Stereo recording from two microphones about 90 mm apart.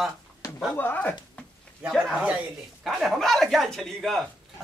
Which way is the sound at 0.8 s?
20° left (ahead or behind).